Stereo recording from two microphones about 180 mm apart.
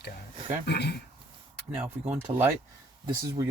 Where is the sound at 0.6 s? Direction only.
70° left (ahead or behind).